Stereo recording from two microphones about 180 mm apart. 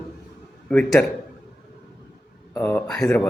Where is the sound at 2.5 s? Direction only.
10° left (ahead or behind).